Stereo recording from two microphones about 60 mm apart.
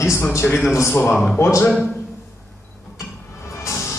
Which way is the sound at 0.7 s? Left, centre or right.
Left.